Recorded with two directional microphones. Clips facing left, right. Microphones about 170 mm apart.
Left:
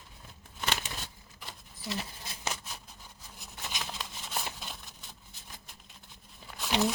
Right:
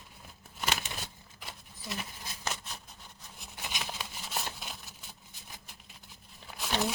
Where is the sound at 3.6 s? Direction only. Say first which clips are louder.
Even; 5° right (ahead or behind).